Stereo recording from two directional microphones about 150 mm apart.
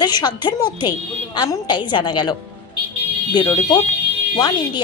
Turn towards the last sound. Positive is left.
turn(degrees=25)  # may be behind; listen again after turning